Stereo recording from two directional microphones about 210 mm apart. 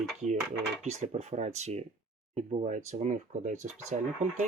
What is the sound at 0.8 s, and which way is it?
Speech, 30° right (ahead or behind).